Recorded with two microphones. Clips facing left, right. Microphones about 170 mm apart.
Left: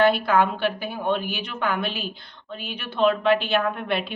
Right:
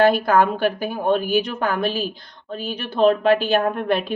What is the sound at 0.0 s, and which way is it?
A woman's voice, 45° right (ahead or behind).